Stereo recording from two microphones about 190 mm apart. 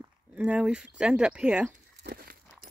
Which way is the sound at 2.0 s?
55° right (ahead or behind).